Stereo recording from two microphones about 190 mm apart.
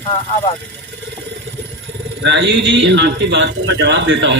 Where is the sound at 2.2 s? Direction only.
65° right (ahead or behind).